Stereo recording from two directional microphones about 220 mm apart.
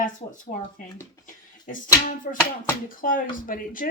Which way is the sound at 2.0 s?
35° left (ahead or behind).